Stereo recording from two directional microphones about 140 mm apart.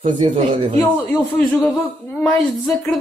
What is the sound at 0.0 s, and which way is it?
Speech, 60° right (ahead or behind).